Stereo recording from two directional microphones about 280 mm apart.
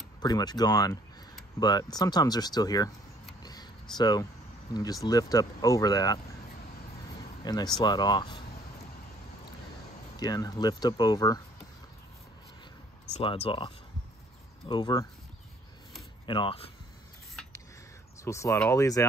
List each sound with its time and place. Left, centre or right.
0.2 s speech: centre
3.9 s speech: centre
7.4 s speech: centre
10.1 s speech: centre
13.1 s speech: centre
16.3 s speech: centre
18.2 s speech: centre